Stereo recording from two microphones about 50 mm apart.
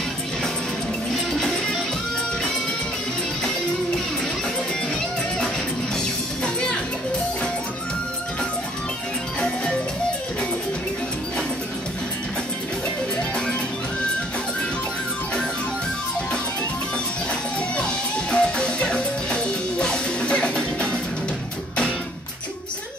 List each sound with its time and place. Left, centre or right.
1.1 s music: centre
17.7 s music: centre